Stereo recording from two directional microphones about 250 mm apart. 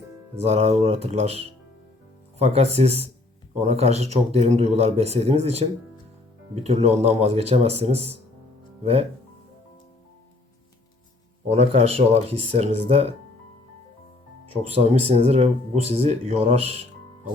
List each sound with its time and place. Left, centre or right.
0.4 s a man's voice: right
11.4 s a man's voice: right
14.5 s a man's voice: right